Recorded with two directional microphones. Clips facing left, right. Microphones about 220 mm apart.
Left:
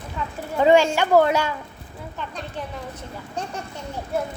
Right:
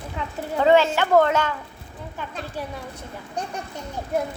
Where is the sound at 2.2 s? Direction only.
5° right (ahead or behind).